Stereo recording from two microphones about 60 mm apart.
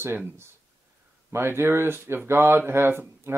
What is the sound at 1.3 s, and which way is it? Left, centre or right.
Speech, right.